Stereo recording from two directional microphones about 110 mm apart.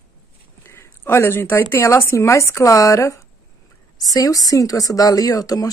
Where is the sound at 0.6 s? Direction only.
20° left (ahead or behind).